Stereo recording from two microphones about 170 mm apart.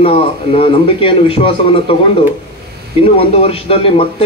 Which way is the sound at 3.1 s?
35° left (ahead or behind).